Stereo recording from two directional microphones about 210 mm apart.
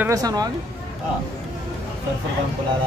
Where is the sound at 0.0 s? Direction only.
15° right (ahead or behind).